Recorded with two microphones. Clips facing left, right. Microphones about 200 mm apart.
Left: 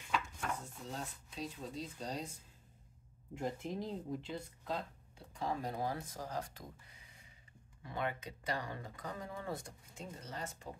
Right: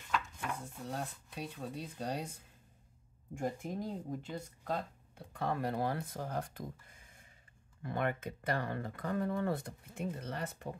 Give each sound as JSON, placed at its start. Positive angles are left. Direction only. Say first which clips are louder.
{"t": 0.8, "sound": "speech", "louder": "right 5 dB", "side_deg": -60}
{"t": 3.3, "sound": "speech", "louder": "right 2 dB", "side_deg": -45}